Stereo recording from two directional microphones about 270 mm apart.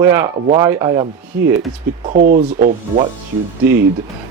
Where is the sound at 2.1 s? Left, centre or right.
Right.